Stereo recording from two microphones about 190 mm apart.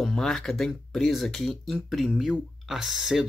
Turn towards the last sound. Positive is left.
turn(degrees=0)  # may be behind; listen again after turning